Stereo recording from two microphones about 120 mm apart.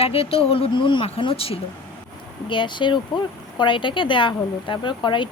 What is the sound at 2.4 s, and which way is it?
Speech, 40° left (ahead or behind).